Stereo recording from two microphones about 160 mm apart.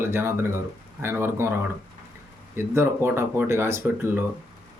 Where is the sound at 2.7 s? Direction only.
15° right (ahead or behind).